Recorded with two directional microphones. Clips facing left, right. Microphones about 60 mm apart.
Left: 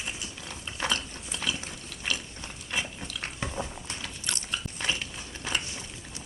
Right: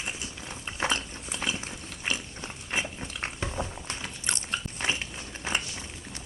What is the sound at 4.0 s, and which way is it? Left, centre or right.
Biting, right.